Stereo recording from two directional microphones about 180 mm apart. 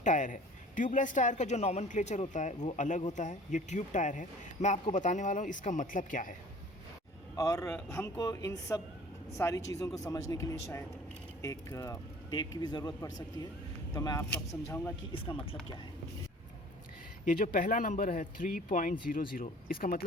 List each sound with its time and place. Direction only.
0.0 s speech: 45° left (ahead or behind)
7.3 s speech: 20° left (ahead or behind)
17.2 s speech: 50° left (ahead or behind)